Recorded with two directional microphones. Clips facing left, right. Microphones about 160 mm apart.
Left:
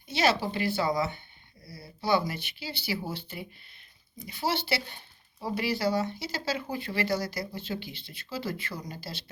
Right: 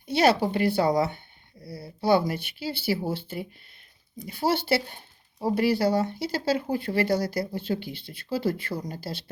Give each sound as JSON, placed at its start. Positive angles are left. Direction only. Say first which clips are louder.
{"t": 0.1, "sound": "speech", "louder": "right 5 dB", "side_deg": -55}
{"t": 1.6, "sound": "speech", "louder": "right 8 dB", "side_deg": -30}
{"t": 2.0, "sound": "speech", "louder": "right 5 dB", "side_deg": -55}
{"t": 4.2, "sound": "speech", "louder": "right 5 dB", "side_deg": -55}